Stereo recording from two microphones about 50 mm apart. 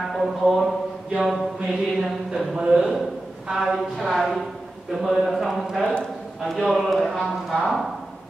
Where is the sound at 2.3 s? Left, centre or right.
Centre.